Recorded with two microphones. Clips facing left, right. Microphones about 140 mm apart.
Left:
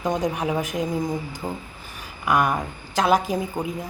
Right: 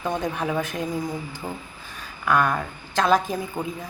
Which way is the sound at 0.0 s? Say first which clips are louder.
Left 2 dB; 15° left (ahead or behind).